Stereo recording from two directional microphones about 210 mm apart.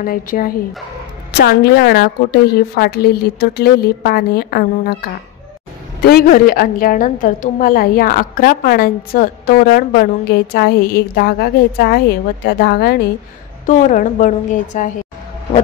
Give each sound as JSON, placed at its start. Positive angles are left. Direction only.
{"t": 0.0, "sound": "a woman's voice", "side_deg": 45}
{"t": 6.0, "sound": "a woman's voice", "side_deg": 45}
{"t": 13.7, "sound": "a woman's voice", "side_deg": 40}